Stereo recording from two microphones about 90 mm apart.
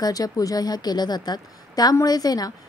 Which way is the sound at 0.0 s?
45° left (ahead or behind).